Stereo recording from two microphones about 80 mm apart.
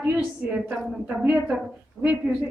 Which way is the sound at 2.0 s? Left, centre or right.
Left.